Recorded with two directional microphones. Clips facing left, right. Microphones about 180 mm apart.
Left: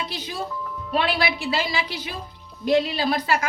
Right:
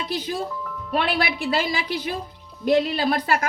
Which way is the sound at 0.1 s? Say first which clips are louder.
Right 4 dB; 50° right (ahead or behind).